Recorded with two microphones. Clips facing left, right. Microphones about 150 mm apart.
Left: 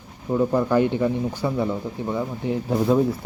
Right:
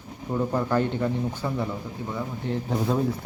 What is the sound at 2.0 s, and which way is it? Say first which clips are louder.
Speech: left 4 dB; 20° left (ahead or behind).